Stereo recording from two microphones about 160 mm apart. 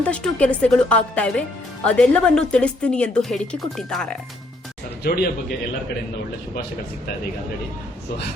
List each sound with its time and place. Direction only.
0.0 s speech: 10° left (ahead or behind)
5.0 s speech: 80° left